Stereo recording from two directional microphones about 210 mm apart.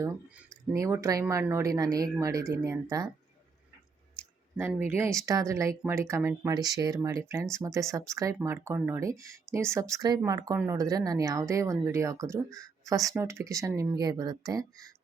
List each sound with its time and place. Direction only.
0.0 s speech: 15° right (ahead or behind)
4.5 s speech: 10° right (ahead or behind)